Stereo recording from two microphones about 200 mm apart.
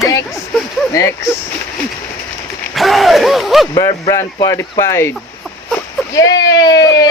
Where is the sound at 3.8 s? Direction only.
20° left (ahead or behind).